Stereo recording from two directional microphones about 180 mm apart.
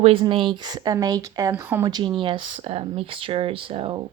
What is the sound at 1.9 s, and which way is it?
Speech, 25° right (ahead or behind).